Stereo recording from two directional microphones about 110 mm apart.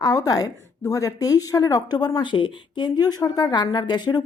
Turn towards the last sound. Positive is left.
turn(degrees=40)  # may be behind; listen again after turning